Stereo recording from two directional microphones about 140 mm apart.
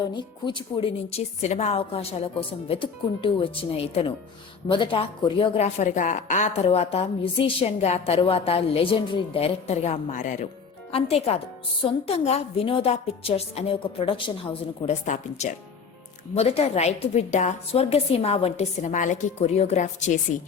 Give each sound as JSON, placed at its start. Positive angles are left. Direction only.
{"t": 0.1, "sound": "a woman's voice", "side_deg": 35}
{"t": 1.1, "sound": "a woman's voice", "side_deg": 50}
{"t": 5.6, "sound": "a woman's voice", "side_deg": 55}
{"t": 10.9, "sound": "a woman's voice", "side_deg": 45}
{"t": 15.0, "sound": "speech", "side_deg": 60}
{"t": 16.3, "sound": "a woman's voice", "side_deg": 45}